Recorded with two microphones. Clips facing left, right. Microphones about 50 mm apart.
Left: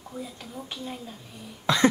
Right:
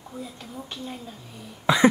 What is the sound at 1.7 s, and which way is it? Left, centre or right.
Cough, centre.